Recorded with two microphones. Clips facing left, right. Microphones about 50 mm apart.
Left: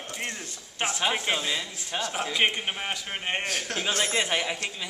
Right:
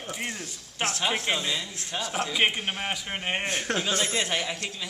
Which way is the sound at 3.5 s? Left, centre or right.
Right.